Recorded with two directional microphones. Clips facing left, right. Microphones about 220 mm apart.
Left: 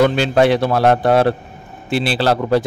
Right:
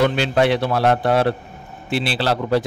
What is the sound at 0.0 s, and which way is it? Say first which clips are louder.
A man's voice: left 4 dB; 45° left (ahead or behind).